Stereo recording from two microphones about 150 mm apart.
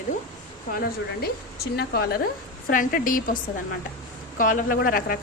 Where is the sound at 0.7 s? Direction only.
85° left.